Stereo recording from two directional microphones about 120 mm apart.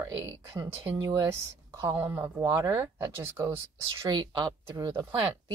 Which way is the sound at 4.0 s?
35° right (ahead or behind).